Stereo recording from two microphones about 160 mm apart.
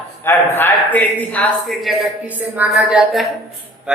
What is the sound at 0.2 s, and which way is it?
Speech, 15° left (ahead or behind).